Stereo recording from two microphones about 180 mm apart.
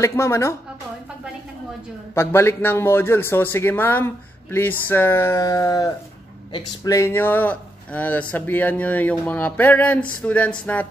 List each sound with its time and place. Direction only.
0.0 s speech: 15° left (ahead or behind)
2.1 s speech: 15° left (ahead or behind)